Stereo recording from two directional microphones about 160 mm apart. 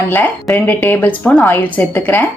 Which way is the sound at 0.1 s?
15° left (ahead or behind).